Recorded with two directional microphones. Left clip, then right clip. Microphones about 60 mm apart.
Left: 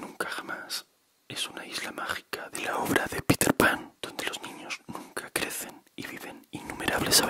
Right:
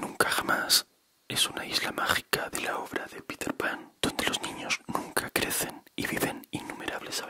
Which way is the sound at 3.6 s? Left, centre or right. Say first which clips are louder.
Left 7 dB; left.